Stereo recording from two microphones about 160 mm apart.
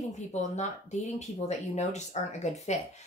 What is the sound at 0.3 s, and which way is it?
A woman's voice, 45° left (ahead or behind).